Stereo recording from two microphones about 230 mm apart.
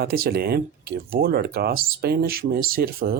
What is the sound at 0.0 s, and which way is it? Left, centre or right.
Speech, right.